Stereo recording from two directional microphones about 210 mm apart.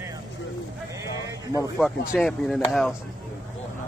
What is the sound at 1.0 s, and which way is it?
Sheep, 15° right (ahead or behind).